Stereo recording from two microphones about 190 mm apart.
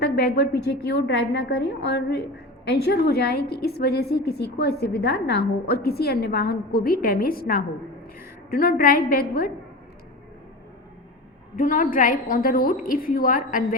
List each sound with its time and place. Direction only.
0.0 s a woman's voice: 55° left (ahead or behind)
11.5 s a woman's voice: 45° left (ahead or behind)